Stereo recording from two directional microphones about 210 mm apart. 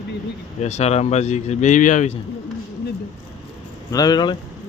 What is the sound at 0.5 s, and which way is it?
Speech, 30° left (ahead or behind).